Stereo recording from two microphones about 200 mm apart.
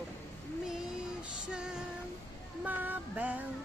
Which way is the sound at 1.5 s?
5° right (ahead or behind).